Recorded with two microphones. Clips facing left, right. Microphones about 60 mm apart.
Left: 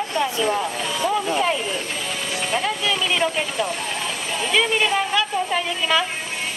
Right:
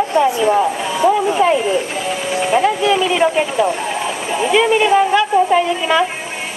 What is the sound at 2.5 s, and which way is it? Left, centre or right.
Music, right.